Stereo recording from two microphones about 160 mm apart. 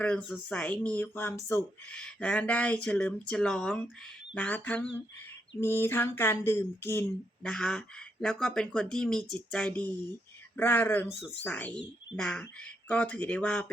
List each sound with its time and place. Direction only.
0.0 s speech: 5° left (ahead or behind)
7.4 s speech: 5° left (ahead or behind)